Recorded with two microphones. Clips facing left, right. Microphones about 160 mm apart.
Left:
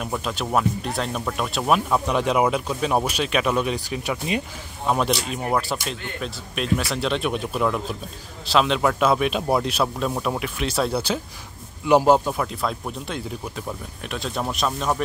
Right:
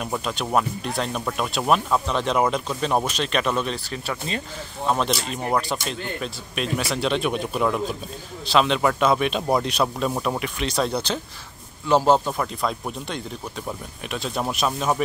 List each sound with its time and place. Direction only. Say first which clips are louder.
0.0 s speech: even; centre (ahead or behind)